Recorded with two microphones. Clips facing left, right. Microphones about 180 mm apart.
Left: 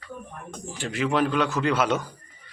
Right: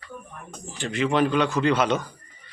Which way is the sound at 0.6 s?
10° left (ahead or behind).